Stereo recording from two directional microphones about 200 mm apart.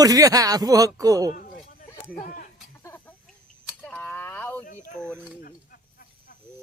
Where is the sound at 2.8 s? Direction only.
10° left (ahead or behind).